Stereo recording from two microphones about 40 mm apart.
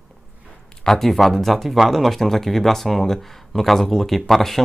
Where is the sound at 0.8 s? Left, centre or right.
Centre.